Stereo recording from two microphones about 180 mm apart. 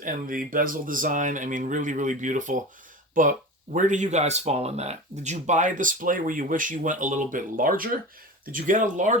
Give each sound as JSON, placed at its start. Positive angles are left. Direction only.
{"t": 0.0, "sound": "speech", "side_deg": -50}